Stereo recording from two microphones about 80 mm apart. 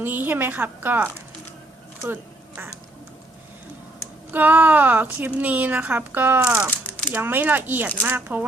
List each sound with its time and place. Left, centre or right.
0.0 s a woman's voice: right
4.3 s a woman's voice: right